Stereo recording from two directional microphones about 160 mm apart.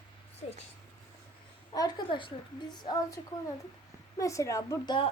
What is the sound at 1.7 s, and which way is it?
Speech, 25° left (ahead or behind).